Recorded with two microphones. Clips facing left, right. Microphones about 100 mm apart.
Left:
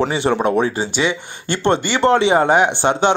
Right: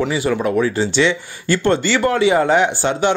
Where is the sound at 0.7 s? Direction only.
15° left (ahead or behind).